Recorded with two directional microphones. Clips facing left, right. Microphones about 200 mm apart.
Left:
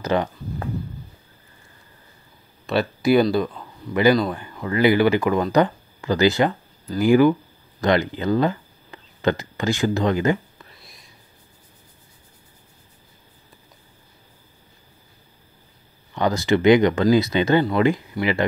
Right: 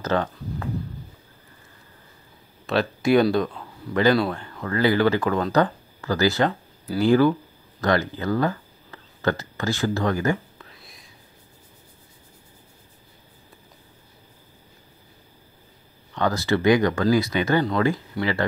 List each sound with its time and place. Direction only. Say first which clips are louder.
0.0 s speech: left 2 dB; 15° left (ahead or behind)
2.6 s speech: left 1 dB; centre (ahead or behind); by 10.4 s 20° left (ahead or behind)
10.6 s whispering: right 1 dB; centre (ahead or behind)
16.2 s speech: left 3 dB; 15° left (ahead or behind)